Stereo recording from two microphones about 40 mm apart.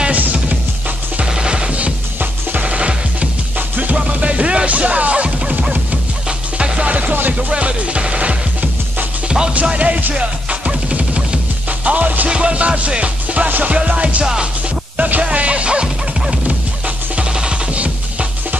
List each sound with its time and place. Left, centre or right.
0.1 s music: right
2.5 s music: right
3.5 s music: right
3.9 s music: right
7.5 s music: right
9.7 s music: right
12.3 s music: right